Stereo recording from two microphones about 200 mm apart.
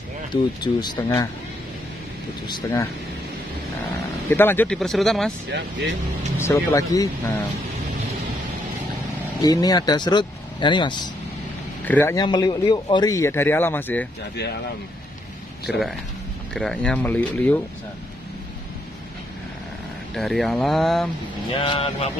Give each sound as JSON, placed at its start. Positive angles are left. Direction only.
{"t": 0.3, "sound": "speech", "side_deg": 20}
{"t": 4.3, "sound": "speech", "side_deg": 10}
{"t": 5.5, "sound": "speech", "side_deg": -65}
{"t": 6.3, "sound": "speech", "side_deg": 15}
{"t": 9.4, "sound": "speech", "side_deg": 20}
{"t": 11.8, "sound": "speech", "side_deg": 10}
{"t": 12.3, "sound": "speech", "side_deg": 20}
{"t": 15.7, "sound": "speech", "side_deg": -5}
{"t": 20.2, "sound": "speech", "side_deg": 0}
{"t": 21.5, "sound": "speech", "side_deg": 25}